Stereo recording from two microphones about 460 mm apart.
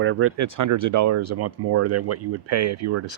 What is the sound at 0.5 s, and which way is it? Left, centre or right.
Speech, right.